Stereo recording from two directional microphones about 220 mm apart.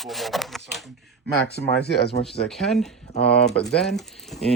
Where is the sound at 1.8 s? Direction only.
50° left (ahead or behind).